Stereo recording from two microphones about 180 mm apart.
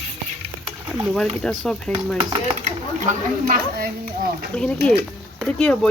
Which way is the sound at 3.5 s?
55° right (ahead or behind).